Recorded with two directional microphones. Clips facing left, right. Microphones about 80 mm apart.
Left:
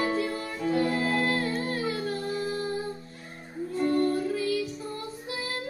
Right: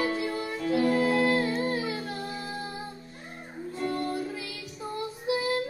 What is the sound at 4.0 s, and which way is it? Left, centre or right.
Music, centre.